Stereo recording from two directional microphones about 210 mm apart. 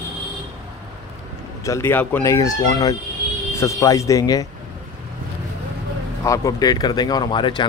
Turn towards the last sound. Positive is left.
turn(degrees=20)  # may be behind; listen again after turning